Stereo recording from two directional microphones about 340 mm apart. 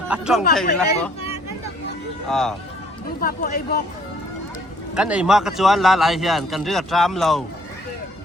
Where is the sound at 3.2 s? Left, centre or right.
Left.